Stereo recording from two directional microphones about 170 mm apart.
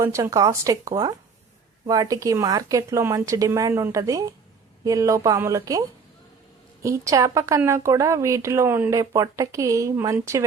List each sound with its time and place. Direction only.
0.0 s speech: 15° right (ahead or behind)
6.8 s a woman's voice: 20° right (ahead or behind)